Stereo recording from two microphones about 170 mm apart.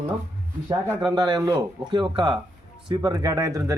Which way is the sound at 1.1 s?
25° right (ahead or behind).